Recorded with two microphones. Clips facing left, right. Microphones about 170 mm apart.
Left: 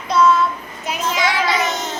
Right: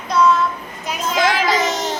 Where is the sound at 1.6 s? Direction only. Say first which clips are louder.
Right 2 dB; 40° right (ahead or behind).